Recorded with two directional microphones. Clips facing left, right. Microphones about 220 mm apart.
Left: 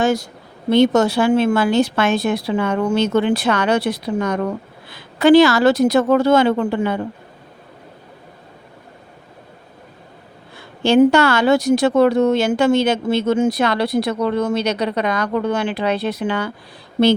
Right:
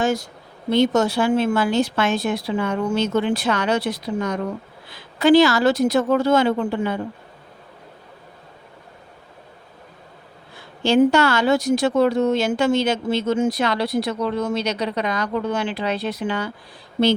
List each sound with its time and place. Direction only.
0.0 s speech: 75° left (ahead or behind)
10.8 s a woman's voice: 55° left (ahead or behind)